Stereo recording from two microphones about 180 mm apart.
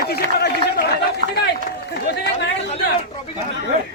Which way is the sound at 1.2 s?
45° right (ahead or behind).